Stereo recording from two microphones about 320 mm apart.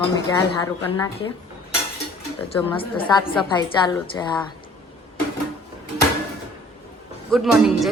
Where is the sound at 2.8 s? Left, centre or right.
Centre.